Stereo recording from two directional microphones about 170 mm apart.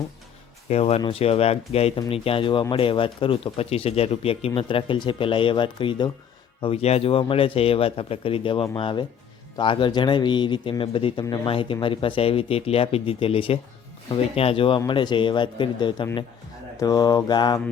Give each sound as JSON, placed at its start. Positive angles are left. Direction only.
{"t": 0.7, "sound": "speech", "side_deg": 35}